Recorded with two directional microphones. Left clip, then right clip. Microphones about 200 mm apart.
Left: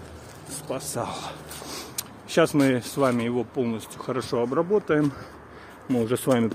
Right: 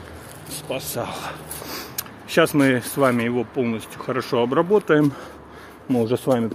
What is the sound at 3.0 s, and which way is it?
Speech, 5° right (ahead or behind).